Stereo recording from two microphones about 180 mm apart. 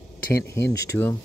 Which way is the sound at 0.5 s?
15° left (ahead or behind).